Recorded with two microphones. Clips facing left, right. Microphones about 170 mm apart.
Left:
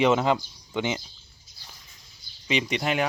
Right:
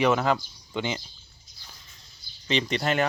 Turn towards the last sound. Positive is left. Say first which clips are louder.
# right 1 dB
turn(degrees=10)  # may be behind; listen again after turning